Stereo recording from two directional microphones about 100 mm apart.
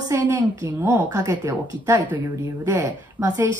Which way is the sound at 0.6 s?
25° right (ahead or behind).